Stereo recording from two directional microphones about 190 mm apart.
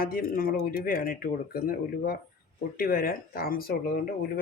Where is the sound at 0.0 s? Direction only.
50° left (ahead or behind).